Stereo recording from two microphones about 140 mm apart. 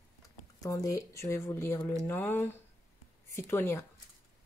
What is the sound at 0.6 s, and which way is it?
Speech, 25° left (ahead or behind).